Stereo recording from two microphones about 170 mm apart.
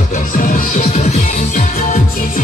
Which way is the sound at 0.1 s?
55° left (ahead or behind).